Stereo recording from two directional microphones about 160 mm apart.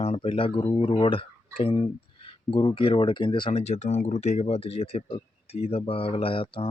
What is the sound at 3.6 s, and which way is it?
Speech, 45° left (ahead or behind).